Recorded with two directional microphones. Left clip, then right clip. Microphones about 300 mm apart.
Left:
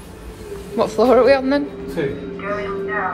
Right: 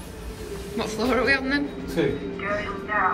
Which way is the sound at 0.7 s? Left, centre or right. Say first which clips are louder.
Left 11 dB; centre.